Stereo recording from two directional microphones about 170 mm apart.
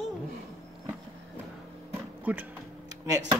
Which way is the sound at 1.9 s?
10° right (ahead or behind).